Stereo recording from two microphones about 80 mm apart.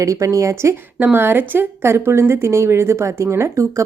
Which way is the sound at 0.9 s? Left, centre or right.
Right.